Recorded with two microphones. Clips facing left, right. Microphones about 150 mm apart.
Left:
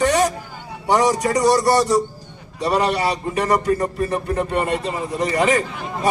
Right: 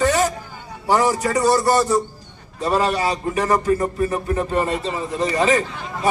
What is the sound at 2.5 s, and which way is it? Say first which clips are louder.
A man's voice: even; 15° left (ahead or behind).